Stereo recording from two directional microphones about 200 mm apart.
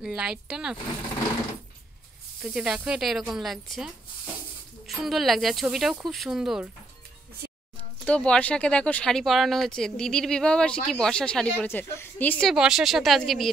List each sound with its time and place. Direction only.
0.0 s speech: 5° right (ahead or behind)
2.4 s speech: 5° right (ahead or behind)
8.0 s speech: 5° left (ahead or behind)